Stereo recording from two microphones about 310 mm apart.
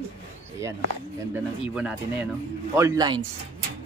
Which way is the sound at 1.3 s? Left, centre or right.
Centre.